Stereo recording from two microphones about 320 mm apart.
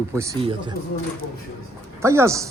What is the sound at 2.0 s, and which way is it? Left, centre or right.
Speech, centre.